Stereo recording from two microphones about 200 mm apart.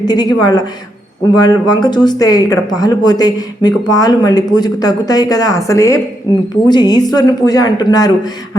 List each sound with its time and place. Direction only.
0.0 s speech: 20° left (ahead or behind)